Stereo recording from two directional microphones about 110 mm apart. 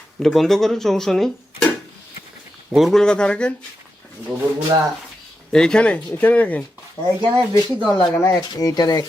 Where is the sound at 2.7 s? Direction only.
Centre (ahead or behind).